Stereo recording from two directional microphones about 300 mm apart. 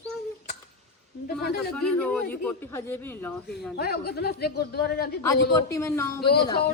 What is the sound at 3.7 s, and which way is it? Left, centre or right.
A woman's voice, left.